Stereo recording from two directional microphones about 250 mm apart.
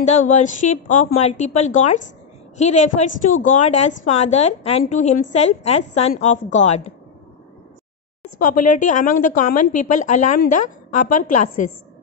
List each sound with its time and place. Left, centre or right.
0.2 s a woman's voice: left
8.4 s a woman's voice: left